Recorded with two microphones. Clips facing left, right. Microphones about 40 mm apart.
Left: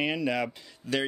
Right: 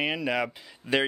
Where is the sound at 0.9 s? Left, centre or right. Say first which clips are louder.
Right 4 dB; right.